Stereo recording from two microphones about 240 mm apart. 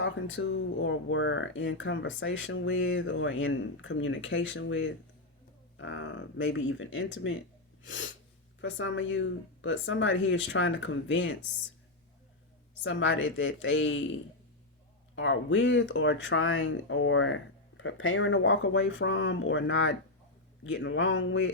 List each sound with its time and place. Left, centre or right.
0.0 s speech: left
12.8 s speech: left
15.1 s speech: left